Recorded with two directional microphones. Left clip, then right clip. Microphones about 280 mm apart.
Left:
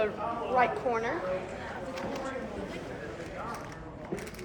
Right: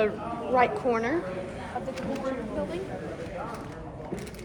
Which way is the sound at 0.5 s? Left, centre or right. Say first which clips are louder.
Right 4 dB; right.